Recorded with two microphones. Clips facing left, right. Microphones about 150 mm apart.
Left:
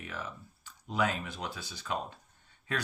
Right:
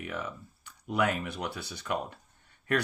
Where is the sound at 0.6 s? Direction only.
60° right (ahead or behind).